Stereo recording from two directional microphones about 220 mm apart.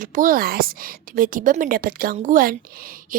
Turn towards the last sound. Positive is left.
turn(degrees=-40)  # may be behind; listen again after turning